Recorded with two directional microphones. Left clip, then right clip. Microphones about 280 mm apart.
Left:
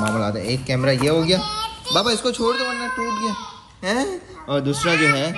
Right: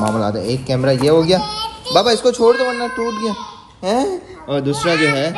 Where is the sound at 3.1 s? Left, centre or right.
Left.